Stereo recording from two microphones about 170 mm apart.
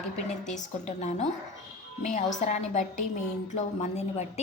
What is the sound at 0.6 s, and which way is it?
A woman's voice, 40° left (ahead or behind).